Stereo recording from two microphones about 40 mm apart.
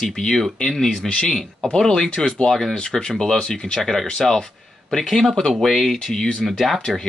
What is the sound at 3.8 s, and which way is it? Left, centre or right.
Speech, centre.